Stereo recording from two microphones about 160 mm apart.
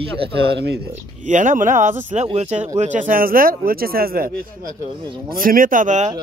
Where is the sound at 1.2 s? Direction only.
50° right (ahead or behind).